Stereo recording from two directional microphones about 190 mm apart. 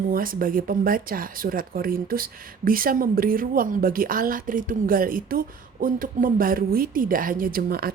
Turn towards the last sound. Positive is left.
turn(degrees=-50)  # may be behind; listen again after turning